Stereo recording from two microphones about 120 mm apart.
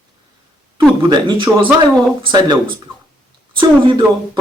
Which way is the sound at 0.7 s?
40° right (ahead or behind).